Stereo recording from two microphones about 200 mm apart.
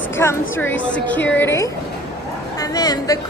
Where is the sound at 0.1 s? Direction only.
10° left (ahead or behind).